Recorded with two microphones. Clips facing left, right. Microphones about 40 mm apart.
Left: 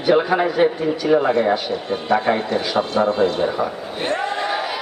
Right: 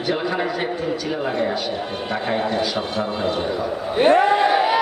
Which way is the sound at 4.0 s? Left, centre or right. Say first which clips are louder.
Right 8 dB; centre.